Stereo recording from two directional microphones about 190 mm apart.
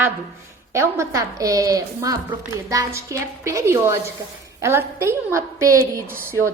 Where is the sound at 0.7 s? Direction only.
15° right (ahead or behind).